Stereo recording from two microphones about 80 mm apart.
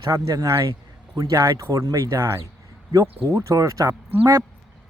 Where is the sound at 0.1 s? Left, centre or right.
Right.